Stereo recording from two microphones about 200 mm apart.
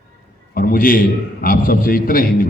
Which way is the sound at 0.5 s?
45° left (ahead or behind).